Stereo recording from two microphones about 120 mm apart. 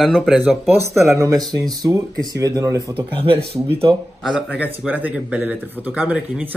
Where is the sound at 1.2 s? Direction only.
35° right (ahead or behind).